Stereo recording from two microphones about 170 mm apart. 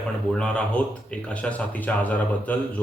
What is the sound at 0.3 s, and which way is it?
Speech, 5° left (ahead or behind).